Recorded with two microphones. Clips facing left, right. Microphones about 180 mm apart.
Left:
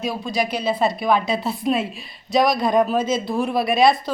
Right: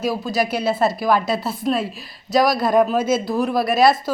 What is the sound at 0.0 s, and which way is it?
Speech, 5° right (ahead or behind).